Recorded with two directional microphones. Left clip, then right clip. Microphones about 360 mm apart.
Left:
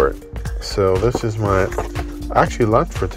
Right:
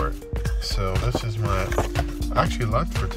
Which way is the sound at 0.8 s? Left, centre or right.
Left.